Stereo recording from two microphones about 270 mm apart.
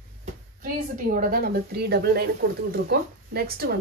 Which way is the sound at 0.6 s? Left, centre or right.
Right.